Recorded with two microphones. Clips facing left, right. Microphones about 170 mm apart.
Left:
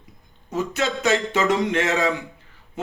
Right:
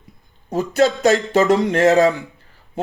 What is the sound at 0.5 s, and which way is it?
A man's voice, 35° right (ahead or behind).